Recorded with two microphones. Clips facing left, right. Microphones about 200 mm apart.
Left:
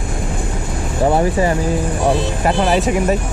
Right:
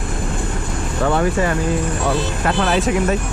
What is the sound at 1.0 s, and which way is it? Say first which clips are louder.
Speech: left 3 dB; 25° left (ahead or behind).